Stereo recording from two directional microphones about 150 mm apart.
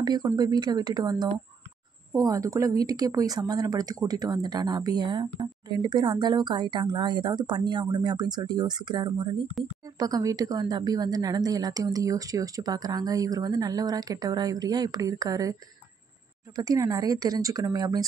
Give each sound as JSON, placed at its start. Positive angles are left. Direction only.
{"t": 0.0, "sound": "speech", "side_deg": -30}
{"t": 16.5, "sound": "speech", "side_deg": -25}